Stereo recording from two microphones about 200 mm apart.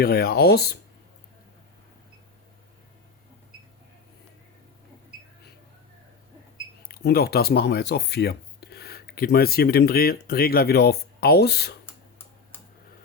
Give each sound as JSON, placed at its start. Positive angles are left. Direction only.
{"t": 0.0, "sound": "speech", "side_deg": 50}
{"t": 6.8, "sound": "speech", "side_deg": 50}